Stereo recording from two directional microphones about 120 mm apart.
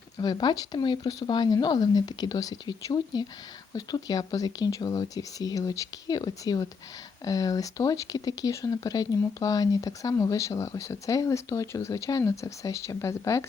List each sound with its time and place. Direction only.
0.2 s speech: 35° left (ahead or behind)